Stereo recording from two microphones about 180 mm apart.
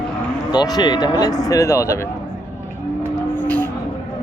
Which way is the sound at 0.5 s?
20° left (ahead or behind).